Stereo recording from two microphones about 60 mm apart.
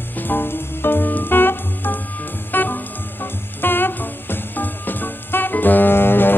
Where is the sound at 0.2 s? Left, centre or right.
Left.